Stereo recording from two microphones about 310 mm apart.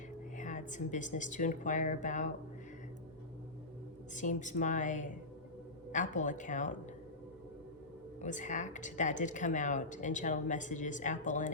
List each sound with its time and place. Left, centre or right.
0.3 s speech: left
4.1 s speech: left
8.2 s speech: left